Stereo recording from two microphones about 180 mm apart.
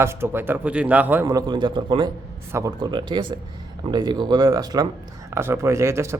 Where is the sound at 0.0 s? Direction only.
15° right (ahead or behind).